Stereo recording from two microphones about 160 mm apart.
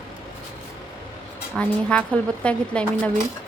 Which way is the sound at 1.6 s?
5° left (ahead or behind).